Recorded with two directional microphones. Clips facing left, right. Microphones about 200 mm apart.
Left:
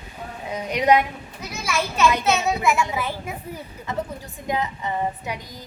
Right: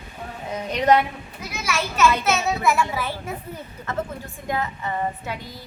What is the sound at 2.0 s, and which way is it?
A child's voice, 15° left (ahead or behind).